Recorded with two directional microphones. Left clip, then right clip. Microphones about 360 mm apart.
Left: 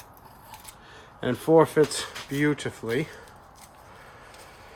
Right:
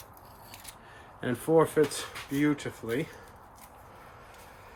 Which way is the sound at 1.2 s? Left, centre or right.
Left.